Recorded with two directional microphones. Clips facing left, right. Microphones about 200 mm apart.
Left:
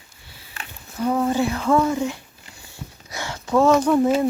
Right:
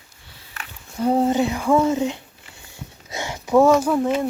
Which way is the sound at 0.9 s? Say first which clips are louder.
Right 2 dB; 30° right (ahead or behind).